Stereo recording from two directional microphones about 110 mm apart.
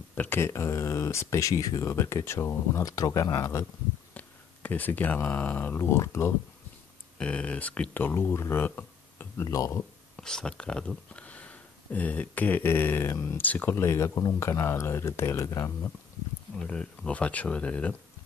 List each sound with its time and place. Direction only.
0.1 s speech: 20° left (ahead or behind)
4.1 s speech: 15° left (ahead or behind)
7.2 s speech: 10° left (ahead or behind)
9.4 s speech: 30° left (ahead or behind)
10.1 s speech: 5° left (ahead or behind); by 15.7 s 30° left (ahead or behind)
16.6 s speech: 10° left (ahead or behind)